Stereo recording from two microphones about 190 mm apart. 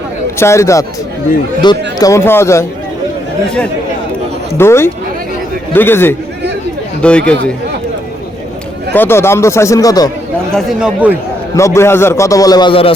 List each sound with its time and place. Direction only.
0.3 s a man's voice: 15° left (ahead or behind)
4.5 s a man's voice: 15° left (ahead or behind)
8.9 s a man's voice: 10° left (ahead or behind)
10.5 s speech: 5° right (ahead or behind)
11.5 s a man's voice: 15° left (ahead or behind)